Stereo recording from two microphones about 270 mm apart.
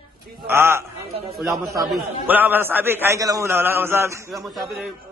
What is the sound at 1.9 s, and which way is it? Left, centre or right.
A man's voice, centre.